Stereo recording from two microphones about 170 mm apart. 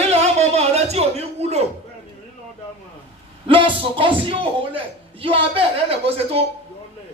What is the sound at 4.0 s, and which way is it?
A man's voice, 30° right (ahead or behind).